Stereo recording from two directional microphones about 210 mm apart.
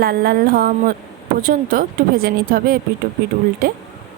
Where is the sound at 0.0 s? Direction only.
45° right (ahead or behind).